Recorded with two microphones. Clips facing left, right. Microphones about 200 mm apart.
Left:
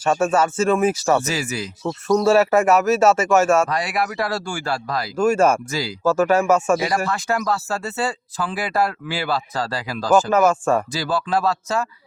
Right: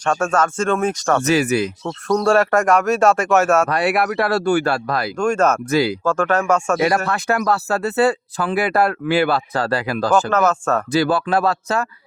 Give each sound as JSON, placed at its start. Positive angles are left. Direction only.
{"t": 0.0, "sound": "speech", "side_deg": 5}
{"t": 1.2, "sound": "speech", "side_deg": -60}
{"t": 1.8, "sound": "speech", "side_deg": 5}
{"t": 3.7, "sound": "speech", "side_deg": -60}
{"t": 5.1, "sound": "speech", "side_deg": 5}
{"t": 5.7, "sound": "speech", "side_deg": -60}
{"t": 6.1, "sound": "speech", "side_deg": 10}
{"t": 6.8, "sound": "speech", "side_deg": -60}
{"t": 10.2, "sound": "speech", "side_deg": 10}
{"t": 10.9, "sound": "speech", "side_deg": -60}